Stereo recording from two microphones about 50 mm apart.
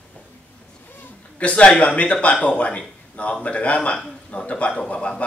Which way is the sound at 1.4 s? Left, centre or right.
Left.